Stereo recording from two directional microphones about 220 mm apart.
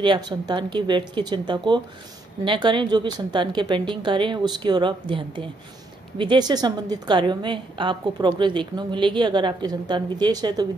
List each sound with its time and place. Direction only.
0.0 s a woman's voice: 20° right (ahead or behind)